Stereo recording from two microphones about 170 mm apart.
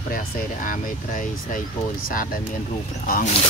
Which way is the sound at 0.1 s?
55° left (ahead or behind).